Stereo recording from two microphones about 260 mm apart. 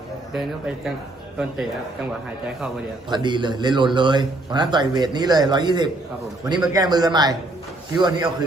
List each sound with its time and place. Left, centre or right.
3.1 s a man's voice: centre